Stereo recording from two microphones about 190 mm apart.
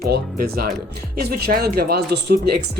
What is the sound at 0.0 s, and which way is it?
Speech, 55° right (ahead or behind).